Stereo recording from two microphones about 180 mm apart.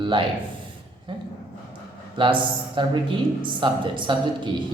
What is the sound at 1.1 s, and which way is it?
A man's voice, 30° right (ahead or behind).